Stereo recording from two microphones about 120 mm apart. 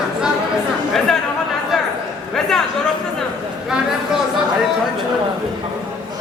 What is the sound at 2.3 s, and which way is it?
Speech, 5° left (ahead or behind).